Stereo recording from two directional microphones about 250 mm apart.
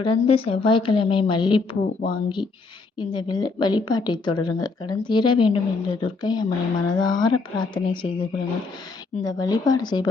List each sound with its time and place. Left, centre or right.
0.0 s a woman's voice: left